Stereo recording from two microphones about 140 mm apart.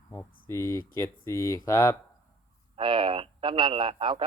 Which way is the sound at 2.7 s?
35° right (ahead or behind).